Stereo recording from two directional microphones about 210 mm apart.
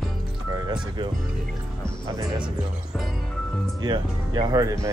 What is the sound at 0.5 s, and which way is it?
Speech, 20° right (ahead or behind).